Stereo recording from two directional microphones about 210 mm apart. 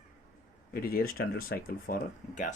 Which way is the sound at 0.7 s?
45° left (ahead or behind).